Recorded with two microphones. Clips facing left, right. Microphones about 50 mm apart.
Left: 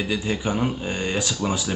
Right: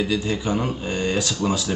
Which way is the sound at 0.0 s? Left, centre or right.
Centre.